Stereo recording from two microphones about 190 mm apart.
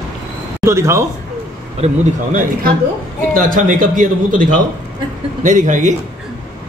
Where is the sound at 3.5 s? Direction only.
45° right (ahead or behind).